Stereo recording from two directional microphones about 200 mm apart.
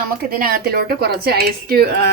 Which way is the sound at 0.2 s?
45° right (ahead or behind).